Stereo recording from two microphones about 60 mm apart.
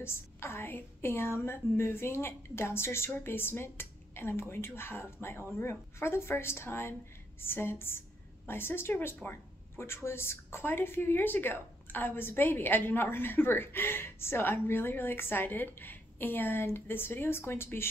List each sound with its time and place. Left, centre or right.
0.0 s a woman's voice: left